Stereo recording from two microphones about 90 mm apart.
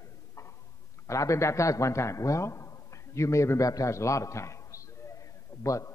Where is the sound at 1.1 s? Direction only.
35° left (ahead or behind).